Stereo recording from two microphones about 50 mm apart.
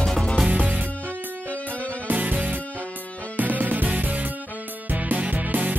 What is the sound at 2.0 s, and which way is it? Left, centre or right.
Music, right.